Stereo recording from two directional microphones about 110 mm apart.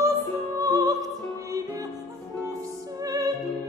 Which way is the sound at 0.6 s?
30° right (ahead or behind).